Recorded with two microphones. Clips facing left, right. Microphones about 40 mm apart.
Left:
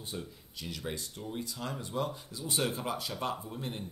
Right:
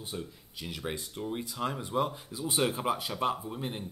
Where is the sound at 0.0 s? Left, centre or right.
Centre.